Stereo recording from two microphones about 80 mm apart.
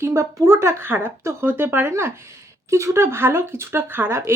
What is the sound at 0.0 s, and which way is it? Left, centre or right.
Speech, right.